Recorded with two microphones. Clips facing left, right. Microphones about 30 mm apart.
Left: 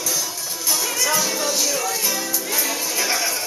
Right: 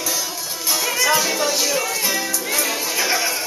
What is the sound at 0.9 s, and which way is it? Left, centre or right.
Music, centre.